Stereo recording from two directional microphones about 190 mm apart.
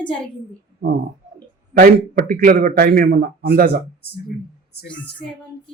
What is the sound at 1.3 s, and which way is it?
A man's voice, 50° right (ahead or behind).